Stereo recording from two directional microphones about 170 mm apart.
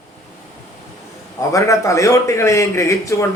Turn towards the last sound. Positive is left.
turn(degrees=15)  # may be behind; listen again after turning